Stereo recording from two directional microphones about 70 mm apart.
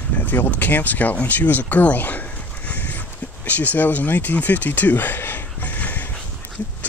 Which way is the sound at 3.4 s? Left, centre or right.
Left.